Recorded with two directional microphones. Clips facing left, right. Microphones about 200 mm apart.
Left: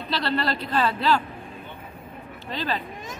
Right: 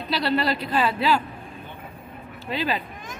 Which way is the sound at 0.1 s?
10° right (ahead or behind).